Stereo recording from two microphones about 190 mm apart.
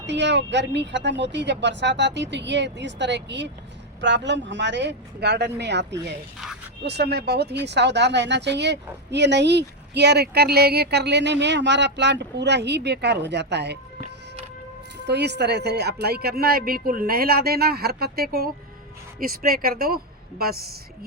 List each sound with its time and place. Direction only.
0.0 s speech: 65° right (ahead or behind)
15.0 s speech: 60° right (ahead or behind)